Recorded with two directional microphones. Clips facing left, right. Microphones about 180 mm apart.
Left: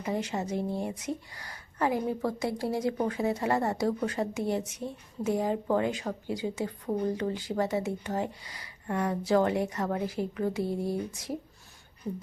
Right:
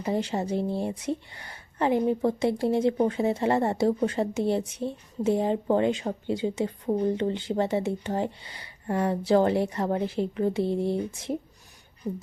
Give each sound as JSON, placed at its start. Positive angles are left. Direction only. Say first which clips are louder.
{"t": 0.0, "sound": "speech", "louder": "right 4 dB", "side_deg": -30}